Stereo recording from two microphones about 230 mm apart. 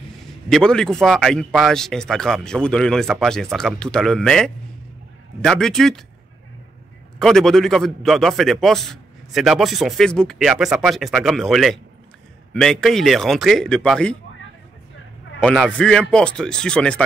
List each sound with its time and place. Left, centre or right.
0.5 s a man's voice: centre
7.2 s a man's voice: centre
15.4 s a man's voice: centre